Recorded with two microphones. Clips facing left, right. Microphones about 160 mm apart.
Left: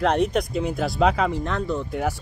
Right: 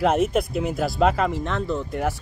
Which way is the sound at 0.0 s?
5° right (ahead or behind).